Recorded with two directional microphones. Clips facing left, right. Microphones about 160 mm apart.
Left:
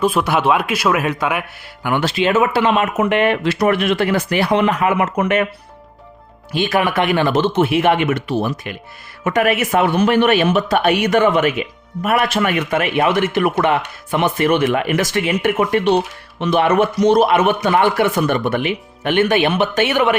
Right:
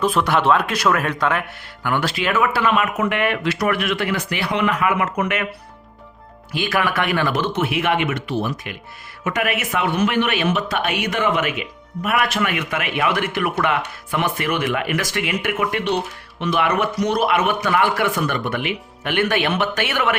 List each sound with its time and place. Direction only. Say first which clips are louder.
0.0 s a man's voice: left 2 dB; 10° left (ahead or behind); by 5.5 s 30° left (ahead or behind)
6.5 s a man's voice: left 4 dB; 25° left (ahead or behind)